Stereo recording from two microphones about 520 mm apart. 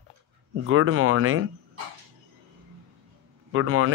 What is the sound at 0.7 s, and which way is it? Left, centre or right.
Speech, right.